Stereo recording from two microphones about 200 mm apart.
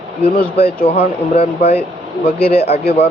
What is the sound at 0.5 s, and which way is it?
Speech, 30° left (ahead or behind).